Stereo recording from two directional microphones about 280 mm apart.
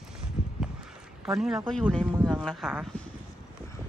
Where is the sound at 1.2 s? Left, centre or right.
Centre.